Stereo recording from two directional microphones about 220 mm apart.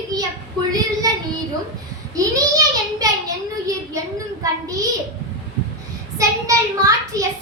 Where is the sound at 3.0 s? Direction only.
15° right (ahead or behind).